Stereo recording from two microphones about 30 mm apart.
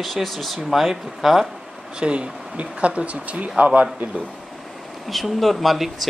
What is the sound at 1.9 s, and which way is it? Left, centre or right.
Speech, right.